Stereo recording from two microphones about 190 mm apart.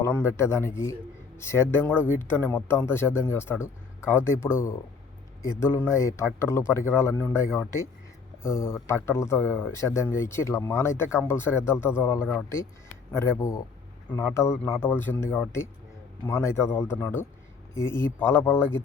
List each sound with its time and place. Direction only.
0.0 s speech: 10° left (ahead or behind)